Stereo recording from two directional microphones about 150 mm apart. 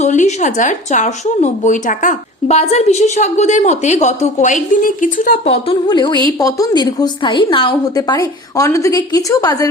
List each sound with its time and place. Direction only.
0.0 s speech: 50° left (ahead or behind)
5.6 s a woman's voice: 30° left (ahead or behind)